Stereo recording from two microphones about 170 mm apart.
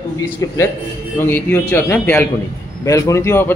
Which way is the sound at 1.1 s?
15° left (ahead or behind).